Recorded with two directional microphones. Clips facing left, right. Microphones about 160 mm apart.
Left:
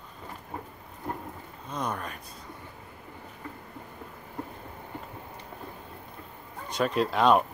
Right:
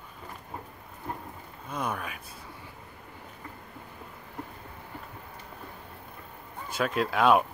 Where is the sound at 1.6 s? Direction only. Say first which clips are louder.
Even; 10° right (ahead or behind).